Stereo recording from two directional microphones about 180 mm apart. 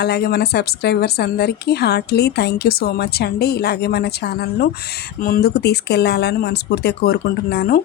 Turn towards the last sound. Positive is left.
turn(degrees=55)  # may be behind; listen again after turning